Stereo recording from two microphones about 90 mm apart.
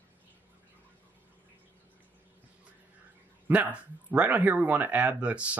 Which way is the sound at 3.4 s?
20° right (ahead or behind).